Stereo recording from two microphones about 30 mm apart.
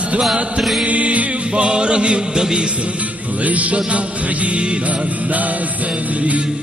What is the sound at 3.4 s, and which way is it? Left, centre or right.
Music, right.